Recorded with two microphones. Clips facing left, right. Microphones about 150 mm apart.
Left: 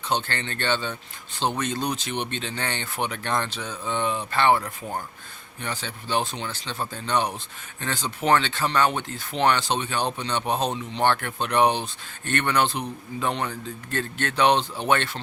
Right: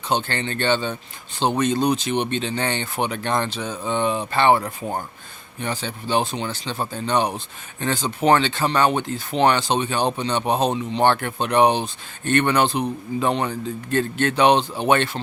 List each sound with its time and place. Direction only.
0.1 s speech: 15° right (ahead or behind); by 5.0 s 30° right (ahead or behind)
5.6 s speech: 20° right (ahead or behind)